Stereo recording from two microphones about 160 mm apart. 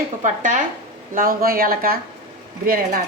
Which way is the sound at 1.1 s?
65° right (ahead or behind).